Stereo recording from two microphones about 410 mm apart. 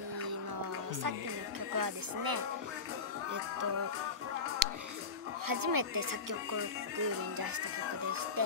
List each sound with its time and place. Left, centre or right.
1.8 s speech: right
4.6 s music: right
5.5 s speech: right
8.4 s speech: right